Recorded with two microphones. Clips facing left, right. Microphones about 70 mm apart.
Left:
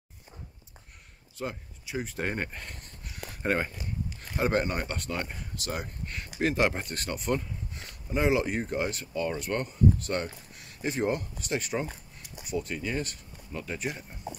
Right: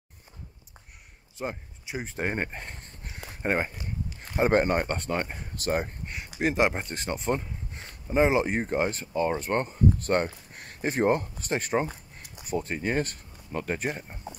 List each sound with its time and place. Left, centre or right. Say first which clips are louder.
1.4 s speech: right 2 dB; right
4.4 s speech: right 5 dB; right
6.0 s speech: right 1 dB; centre; by 14.1 s right